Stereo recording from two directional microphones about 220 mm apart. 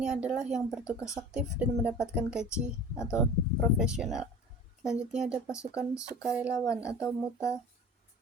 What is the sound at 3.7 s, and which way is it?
Speech, 5° right (ahead or behind).